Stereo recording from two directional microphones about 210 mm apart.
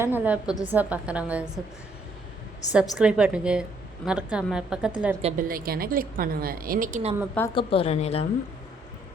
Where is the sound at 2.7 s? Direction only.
5° right (ahead or behind).